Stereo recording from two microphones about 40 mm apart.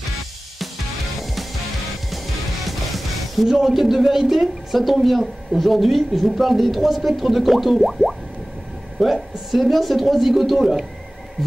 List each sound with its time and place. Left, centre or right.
2.6 s speech: centre